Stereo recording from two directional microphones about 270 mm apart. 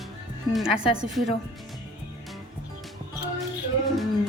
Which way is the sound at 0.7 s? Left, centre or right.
Left.